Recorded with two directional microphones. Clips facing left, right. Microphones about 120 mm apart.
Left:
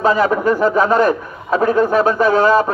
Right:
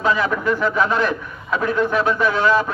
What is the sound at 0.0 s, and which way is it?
A man's voice, 40° left (ahead or behind).